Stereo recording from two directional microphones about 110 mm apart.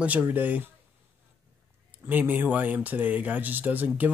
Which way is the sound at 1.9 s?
15° right (ahead or behind).